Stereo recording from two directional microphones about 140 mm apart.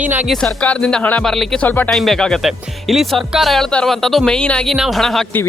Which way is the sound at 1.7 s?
10° left (ahead or behind).